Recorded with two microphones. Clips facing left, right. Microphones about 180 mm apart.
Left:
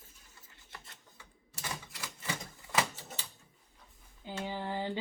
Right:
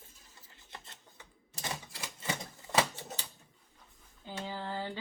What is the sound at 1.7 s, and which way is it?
Typewriter, 30° right (ahead or behind).